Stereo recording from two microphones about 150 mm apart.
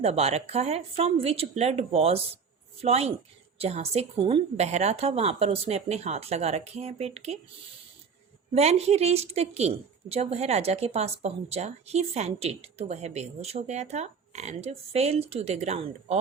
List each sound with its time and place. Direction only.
0.0 s a woman's voice: 45° right (ahead or behind)
8.5 s a woman's voice: 45° right (ahead or behind)